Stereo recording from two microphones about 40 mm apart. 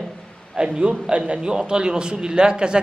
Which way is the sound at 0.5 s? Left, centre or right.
Centre.